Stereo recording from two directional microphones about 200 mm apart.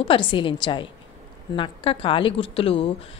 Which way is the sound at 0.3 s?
25° left (ahead or behind).